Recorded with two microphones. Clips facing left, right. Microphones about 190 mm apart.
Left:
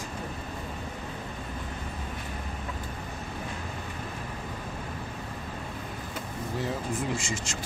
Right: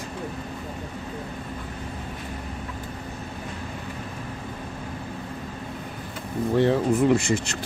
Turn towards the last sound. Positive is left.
turn(degrees=-60)  # may be behind; listen again after turning